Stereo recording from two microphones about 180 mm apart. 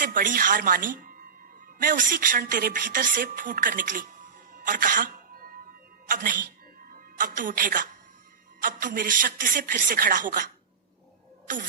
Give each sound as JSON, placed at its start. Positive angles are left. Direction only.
{"t": 0.0, "sound": "a woman's voice", "side_deg": -50}
{"t": 7.2, "sound": "speech", "side_deg": -50}